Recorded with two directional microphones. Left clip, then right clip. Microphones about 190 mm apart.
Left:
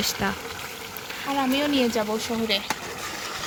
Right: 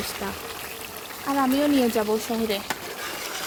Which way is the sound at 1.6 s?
45° right (ahead or behind).